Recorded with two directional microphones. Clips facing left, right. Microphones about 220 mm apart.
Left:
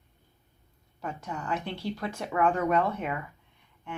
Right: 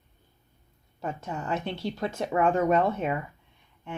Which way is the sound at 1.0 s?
25° right (ahead or behind).